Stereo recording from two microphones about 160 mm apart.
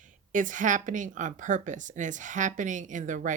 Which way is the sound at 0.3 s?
55° right (ahead or behind).